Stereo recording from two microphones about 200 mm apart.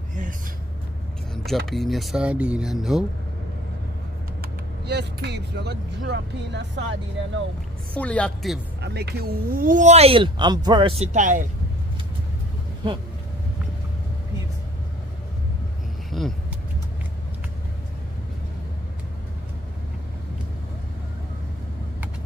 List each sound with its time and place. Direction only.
1.3 s speech: centre (ahead or behind)
4.4 s speech: 55° right (ahead or behind)
7.9 s speech: 5° left (ahead or behind)
8.8 s speech: 55° right (ahead or behind); by 11.1 s 25° right (ahead or behind)
11.1 s speech: 40° right (ahead or behind)
16.1 s vehicle: centre (ahead or behind)